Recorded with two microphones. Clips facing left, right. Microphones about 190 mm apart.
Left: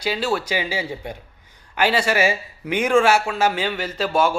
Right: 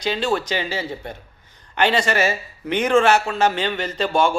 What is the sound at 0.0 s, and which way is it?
Speech, 5° left (ahead or behind).